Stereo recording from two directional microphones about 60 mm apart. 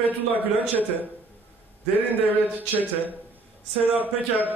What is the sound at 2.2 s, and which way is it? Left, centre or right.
Speech, right.